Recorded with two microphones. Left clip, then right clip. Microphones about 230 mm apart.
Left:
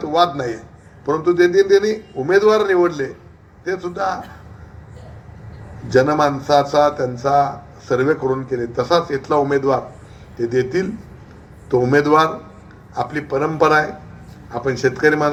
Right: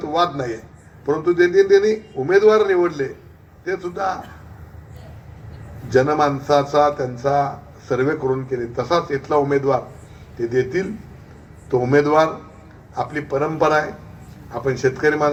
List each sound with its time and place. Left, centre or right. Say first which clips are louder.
0.0 s a man's voice: left 3 dB; left
5.9 s a man's voice: left 2 dB; left